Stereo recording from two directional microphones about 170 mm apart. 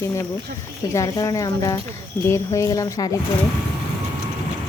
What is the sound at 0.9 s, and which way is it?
Speech, 20° left (ahead or behind).